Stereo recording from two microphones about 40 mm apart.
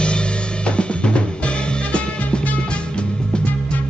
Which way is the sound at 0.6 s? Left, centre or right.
Left.